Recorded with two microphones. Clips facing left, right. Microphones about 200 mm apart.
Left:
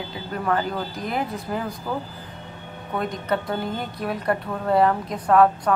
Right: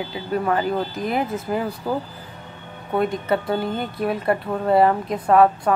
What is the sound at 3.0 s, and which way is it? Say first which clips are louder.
A woman's voice: right 4 dB; 5° right (ahead or behind).